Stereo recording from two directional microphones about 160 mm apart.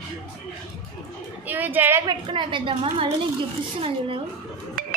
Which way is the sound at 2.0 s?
30° right (ahead or behind).